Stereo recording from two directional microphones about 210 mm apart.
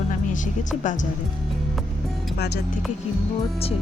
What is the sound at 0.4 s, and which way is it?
Speech, 35° left (ahead or behind).